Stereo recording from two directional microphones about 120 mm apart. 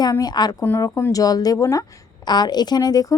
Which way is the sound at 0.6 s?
20° left (ahead or behind).